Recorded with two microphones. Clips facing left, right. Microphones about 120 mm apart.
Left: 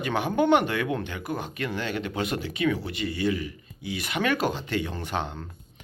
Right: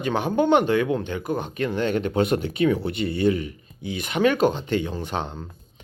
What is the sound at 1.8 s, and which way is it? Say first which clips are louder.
Speech: right 7 dB; 45° right (ahead or behind).